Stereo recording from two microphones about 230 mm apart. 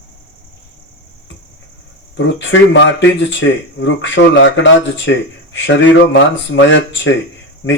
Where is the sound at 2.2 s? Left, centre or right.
Left.